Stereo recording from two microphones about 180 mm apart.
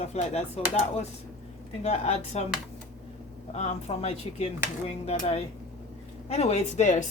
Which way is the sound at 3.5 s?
35° left (ahead or behind).